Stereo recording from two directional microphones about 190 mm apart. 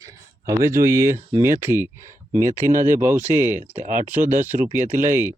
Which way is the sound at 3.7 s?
40° right (ahead or behind).